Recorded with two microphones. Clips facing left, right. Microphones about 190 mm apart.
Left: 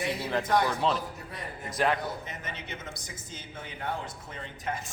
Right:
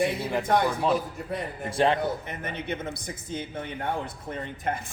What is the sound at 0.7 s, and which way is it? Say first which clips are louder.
Speech: right 3 dB; 10° right (ahead or behind).